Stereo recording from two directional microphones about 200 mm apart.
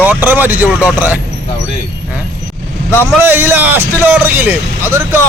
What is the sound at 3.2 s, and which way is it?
Speech, 10° right (ahead or behind).